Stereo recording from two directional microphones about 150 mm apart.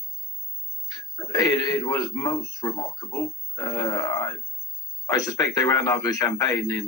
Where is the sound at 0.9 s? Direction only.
25° left (ahead or behind).